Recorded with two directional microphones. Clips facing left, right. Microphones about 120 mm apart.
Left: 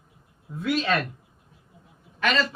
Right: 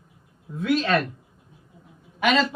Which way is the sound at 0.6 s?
Centre (ahead or behind).